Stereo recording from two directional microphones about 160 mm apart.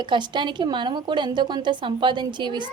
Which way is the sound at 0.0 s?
30° right (ahead or behind).